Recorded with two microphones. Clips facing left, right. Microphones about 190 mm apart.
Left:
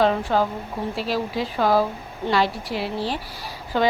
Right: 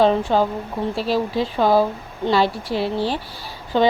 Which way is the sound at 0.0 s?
25° right (ahead or behind).